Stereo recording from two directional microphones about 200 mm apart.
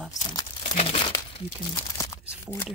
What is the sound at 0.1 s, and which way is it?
Crumpling, 20° left (ahead or behind).